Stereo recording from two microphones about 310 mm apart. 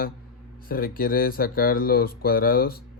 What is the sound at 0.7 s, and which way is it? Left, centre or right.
Mantra, left.